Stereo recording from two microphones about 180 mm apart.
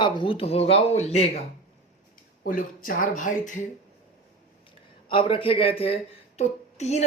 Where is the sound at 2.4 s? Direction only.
50° left (ahead or behind).